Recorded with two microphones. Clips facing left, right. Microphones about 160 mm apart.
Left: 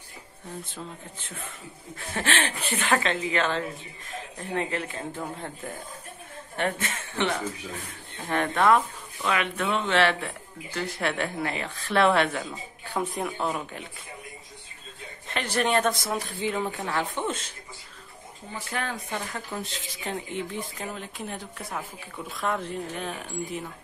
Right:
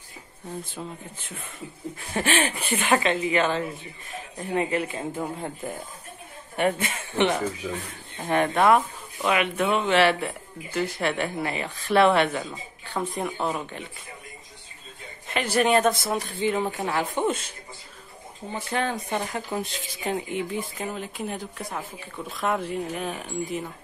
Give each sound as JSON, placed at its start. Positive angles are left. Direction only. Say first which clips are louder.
{"t": 2.1, "sound": "speech", "louder": "right 3 dB", "side_deg": -10}
{"t": 12.8, "sound": "speech", "louder": "even", "side_deg": 10}
{"t": 13.2, "sound": "speech", "louder": "right 1 dB", "side_deg": 0}
{"t": 15.2, "sound": "speech", "louder": "right 4 dB", "side_deg": -5}
{"t": 16.6, "sound": "speech", "louder": "right 2 dB", "side_deg": -15}
{"t": 18.5, "sound": "speech", "louder": "right 5 dB", "side_deg": -25}